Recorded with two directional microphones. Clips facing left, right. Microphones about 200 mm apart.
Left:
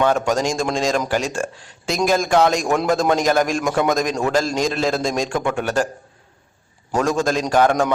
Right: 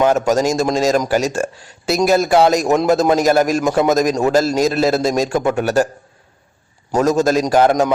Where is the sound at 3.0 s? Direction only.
5° right (ahead or behind).